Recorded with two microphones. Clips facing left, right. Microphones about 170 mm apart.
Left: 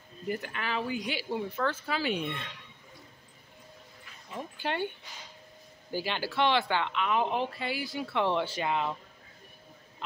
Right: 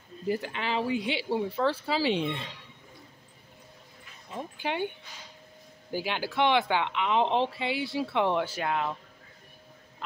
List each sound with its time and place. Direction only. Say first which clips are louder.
0.3 s speech: right 4 dB; 25° right (ahead or behind)
4.3 s speech: right 1 dB; 15° right (ahead or behind)
5.9 s speech: right 1 dB; 10° right (ahead or behind)
8.6 s speech: right 1 dB; 5° left (ahead or behind)